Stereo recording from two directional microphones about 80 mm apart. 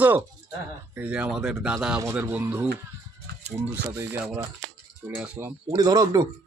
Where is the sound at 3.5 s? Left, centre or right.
Right.